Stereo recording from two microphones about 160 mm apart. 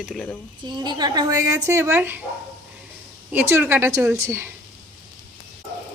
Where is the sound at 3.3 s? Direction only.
15° right (ahead or behind).